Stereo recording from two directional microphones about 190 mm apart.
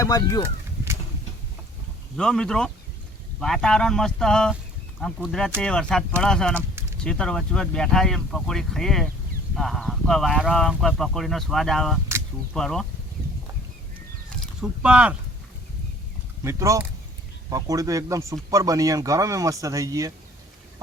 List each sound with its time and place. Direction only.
0.0 s speech: 20° left (ahead or behind)
2.1 s speech: 5° left (ahead or behind)
14.3 s a sound: 5° right (ahead or behind)
16.4 s speech: 15° right (ahead or behind)